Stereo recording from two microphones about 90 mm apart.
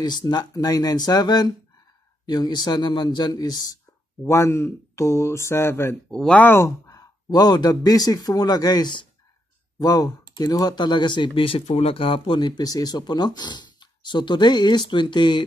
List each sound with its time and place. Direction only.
0.0 s speech: 50° left (ahead or behind)
4.2 s speech: 30° left (ahead or behind)
6.0 s speech: 10° left (ahead or behind)
6.4 s speech: 25° left (ahead or behind)
6.9 s a sound: 45° left (ahead or behind)
7.8 s speech: 45° left (ahead or behind); by 15.4 s 60° left (ahead or behind)